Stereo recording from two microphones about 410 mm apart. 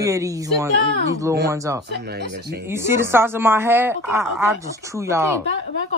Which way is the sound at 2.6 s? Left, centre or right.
Centre.